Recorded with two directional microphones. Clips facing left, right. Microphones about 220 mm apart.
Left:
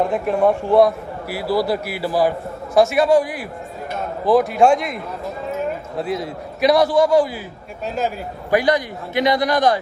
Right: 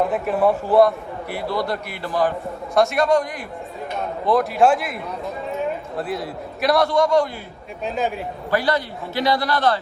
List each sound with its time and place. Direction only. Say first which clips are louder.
0.0 s a man's voice: left 2 dB; centre (ahead or behind)
8.4 s a man's voice: left 4 dB; 15° left (ahead or behind)